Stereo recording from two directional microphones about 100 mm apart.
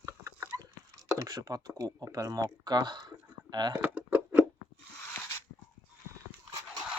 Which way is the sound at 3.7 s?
20° right (ahead or behind).